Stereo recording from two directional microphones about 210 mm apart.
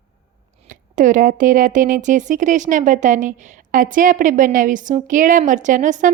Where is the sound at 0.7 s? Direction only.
40° right (ahead or behind).